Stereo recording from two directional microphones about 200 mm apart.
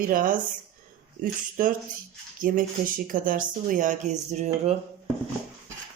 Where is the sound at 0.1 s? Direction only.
45° right (ahead or behind).